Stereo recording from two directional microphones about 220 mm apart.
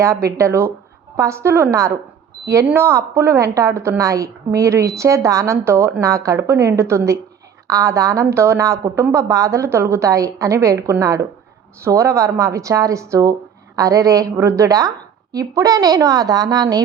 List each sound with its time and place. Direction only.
0.0 s a woman's voice: 15° right (ahead or behind)